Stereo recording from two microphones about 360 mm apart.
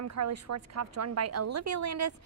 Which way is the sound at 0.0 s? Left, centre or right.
Right.